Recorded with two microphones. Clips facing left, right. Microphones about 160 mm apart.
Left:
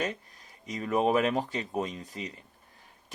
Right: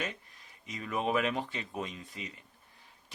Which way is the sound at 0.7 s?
40° left (ahead or behind).